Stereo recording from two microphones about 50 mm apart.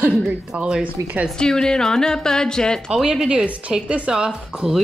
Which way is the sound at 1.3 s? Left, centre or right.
Centre.